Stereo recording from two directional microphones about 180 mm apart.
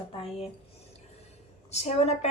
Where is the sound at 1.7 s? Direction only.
35° left (ahead or behind).